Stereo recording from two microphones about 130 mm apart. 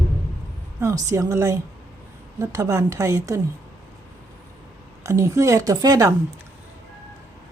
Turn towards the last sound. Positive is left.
turn(degrees=-25)  # may be behind; listen again after turning